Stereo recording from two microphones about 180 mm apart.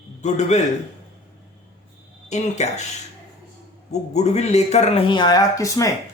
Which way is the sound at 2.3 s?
40° left (ahead or behind).